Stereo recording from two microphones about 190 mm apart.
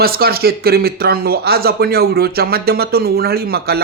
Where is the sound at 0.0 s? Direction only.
55° right (ahead or behind).